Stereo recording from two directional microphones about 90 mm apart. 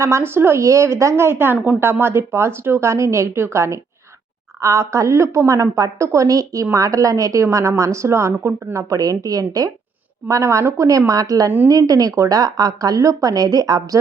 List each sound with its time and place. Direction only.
0.0 s a woman's voice: 30° right (ahead or behind)